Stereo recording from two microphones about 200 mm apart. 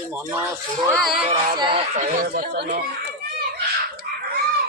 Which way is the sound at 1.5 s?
25° right (ahead or behind).